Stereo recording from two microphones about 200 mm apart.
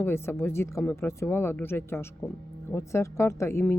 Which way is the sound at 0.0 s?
10° left (ahead or behind).